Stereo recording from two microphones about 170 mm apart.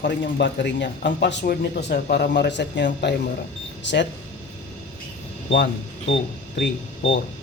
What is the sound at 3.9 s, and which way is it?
Speech, 90° left.